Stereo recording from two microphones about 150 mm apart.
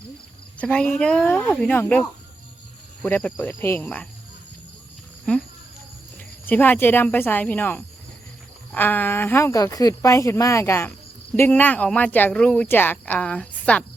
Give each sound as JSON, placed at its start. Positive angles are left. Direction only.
{"t": 0.6, "sound": "speech", "side_deg": 10}
{"t": 1.5, "sound": "speech", "side_deg": 5}
{"t": 5.3, "sound": "speech", "side_deg": 10}